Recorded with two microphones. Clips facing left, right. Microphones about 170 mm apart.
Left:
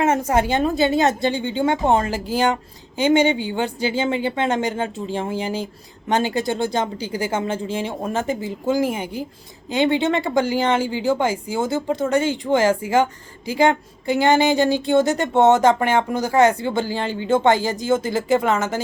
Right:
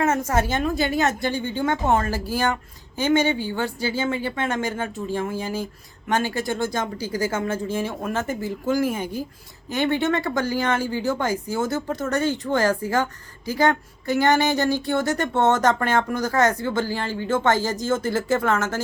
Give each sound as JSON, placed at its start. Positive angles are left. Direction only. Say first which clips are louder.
{"t": 0.0, "sound": "a sound", "louder": "left 3 dB", "side_deg": 30}
{"t": 0.3, "sound": "speech", "louder": "left 3 dB", "side_deg": 15}
{"t": 0.5, "sound": "speech", "louder": "left 4 dB", "side_deg": 25}
{"t": 7.0, "sound": "speech", "louder": "left 1 dB", "side_deg": 15}